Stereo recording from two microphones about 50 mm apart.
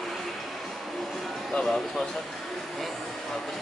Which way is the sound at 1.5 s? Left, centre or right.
Centre.